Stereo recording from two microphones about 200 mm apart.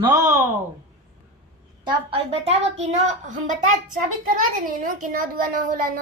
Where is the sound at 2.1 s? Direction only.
30° right (ahead or behind).